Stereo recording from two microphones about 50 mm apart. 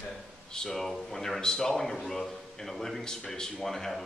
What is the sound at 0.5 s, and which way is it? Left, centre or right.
Speech, centre.